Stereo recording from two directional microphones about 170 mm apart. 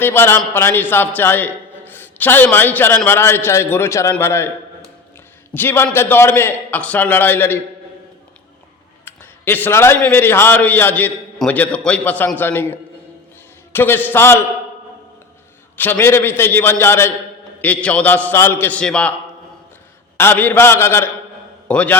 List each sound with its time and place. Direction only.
0.0 s a man's voice: 15° left (ahead or behind)
5.5 s a man's voice: 15° left (ahead or behind)
9.0 s a man's voice: 15° left (ahead or behind)
13.7 s a man's voice: 10° left (ahead or behind)
15.8 s a man's voice: 10° left (ahead or behind)
20.1 s a man's voice: 15° left (ahead or behind)